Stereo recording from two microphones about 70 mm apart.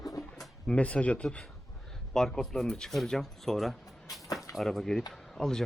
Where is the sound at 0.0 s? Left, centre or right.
Left.